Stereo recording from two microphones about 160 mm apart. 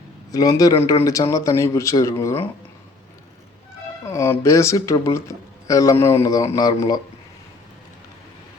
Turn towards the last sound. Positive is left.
turn(degrees=25)  # may be behind; listen again after turning